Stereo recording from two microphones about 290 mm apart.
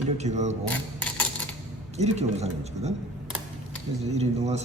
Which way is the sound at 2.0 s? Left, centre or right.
Right.